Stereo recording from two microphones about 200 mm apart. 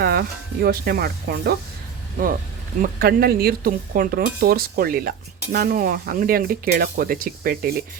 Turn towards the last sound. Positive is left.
turn(degrees=-45)  # may be behind; listen again after turning